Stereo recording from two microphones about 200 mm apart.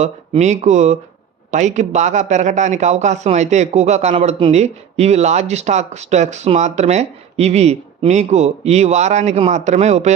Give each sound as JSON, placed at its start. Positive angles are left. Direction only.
{"t": 0.0, "sound": "a man's voice", "side_deg": -35}